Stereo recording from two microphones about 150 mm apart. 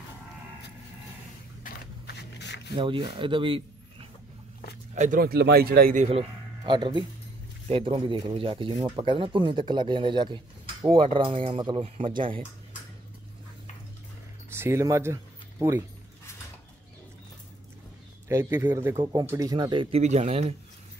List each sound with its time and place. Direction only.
2.7 s speech: 35° right (ahead or behind)
4.9 s speech: 60° right (ahead or behind); by 5.9 s 85° right
6.0 s speech: 35° right (ahead or behind)
14.5 s speech: 15° right (ahead or behind)
18.3 s speech: 15° right (ahead or behind); by 20.0 s 35° right (ahead or behind)
20.0 s speech: 45° right (ahead or behind)